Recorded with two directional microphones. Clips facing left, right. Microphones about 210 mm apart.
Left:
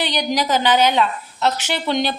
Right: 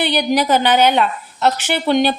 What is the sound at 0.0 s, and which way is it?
A woman's voice, 60° right (ahead or behind).